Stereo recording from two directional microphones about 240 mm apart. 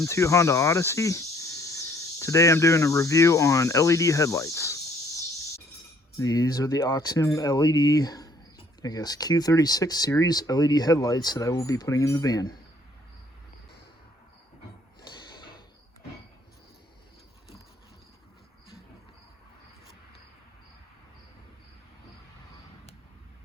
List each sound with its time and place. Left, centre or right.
0.0 s speech: centre
6.1 s speech: centre
15.4 s a sound: centre